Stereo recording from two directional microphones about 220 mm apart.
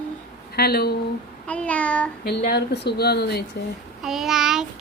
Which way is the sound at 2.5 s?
50° left (ahead or behind).